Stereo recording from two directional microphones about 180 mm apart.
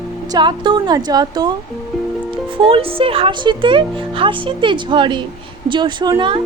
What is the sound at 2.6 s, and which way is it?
Speech, 30° right (ahead or behind).